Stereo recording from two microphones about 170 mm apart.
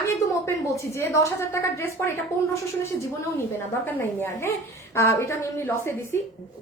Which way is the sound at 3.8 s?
15° left (ahead or behind).